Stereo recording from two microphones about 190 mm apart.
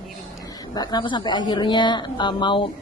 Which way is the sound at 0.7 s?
20° left (ahead or behind).